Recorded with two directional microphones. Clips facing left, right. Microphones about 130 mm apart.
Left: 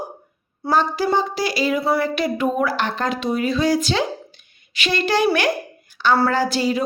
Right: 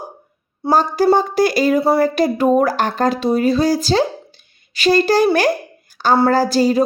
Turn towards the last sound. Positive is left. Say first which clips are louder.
# right 6 dB
turn(degrees=-40)  # may be behind; listen again after turning